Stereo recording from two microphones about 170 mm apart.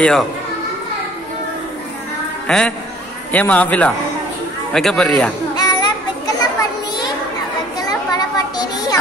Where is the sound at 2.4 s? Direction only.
5° left (ahead or behind).